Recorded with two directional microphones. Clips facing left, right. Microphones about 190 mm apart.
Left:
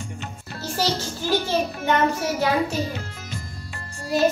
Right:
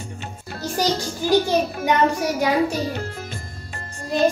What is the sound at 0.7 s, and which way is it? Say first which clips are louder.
Speech: right 3 dB; 15° right (ahead or behind).